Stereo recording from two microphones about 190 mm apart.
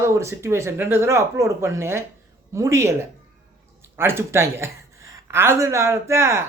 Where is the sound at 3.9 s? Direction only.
15° right (ahead or behind).